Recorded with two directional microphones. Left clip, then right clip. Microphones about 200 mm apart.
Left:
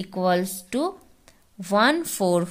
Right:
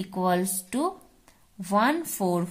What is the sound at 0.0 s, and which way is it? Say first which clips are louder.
Speech: left 3 dB; 25° left (ahead or behind).